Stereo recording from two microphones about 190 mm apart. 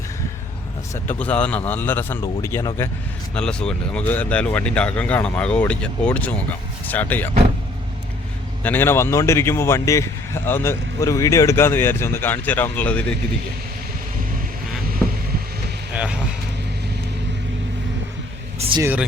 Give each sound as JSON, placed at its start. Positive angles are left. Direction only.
{"t": 1.0, "sound": "a man's voice", "side_deg": 5}
{"t": 8.6, "sound": "a man's voice", "side_deg": 10}
{"t": 15.0, "sound": "vehicle", "side_deg": 0}
{"t": 15.9, "sound": "speech", "side_deg": -5}
{"t": 18.6, "sound": "speech", "side_deg": -35}